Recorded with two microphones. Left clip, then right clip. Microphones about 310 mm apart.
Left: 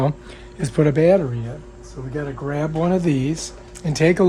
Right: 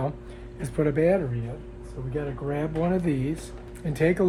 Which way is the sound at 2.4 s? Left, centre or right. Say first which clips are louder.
Left 6 dB; left.